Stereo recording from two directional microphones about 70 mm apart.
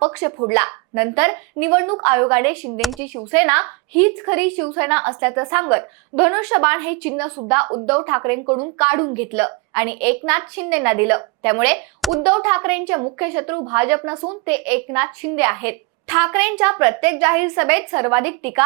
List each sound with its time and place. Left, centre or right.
0.0 s a woman's voice: right
8.8 s a woman's voice: right
13.7 s a woman's voice: right
14.4 s a woman's voice: centre